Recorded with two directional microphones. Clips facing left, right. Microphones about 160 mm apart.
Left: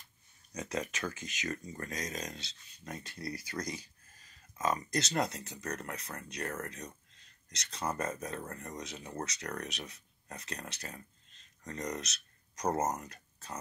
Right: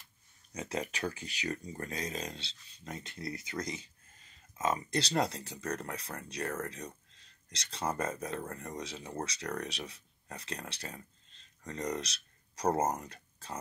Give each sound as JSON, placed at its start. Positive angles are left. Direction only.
{"t": 0.5, "sound": "speech", "side_deg": -30}